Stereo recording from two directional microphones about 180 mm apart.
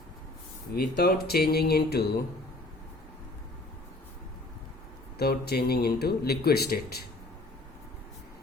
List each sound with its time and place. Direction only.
0.8 s speech: 60° left (ahead or behind)
5.1 s speech: 60° left (ahead or behind)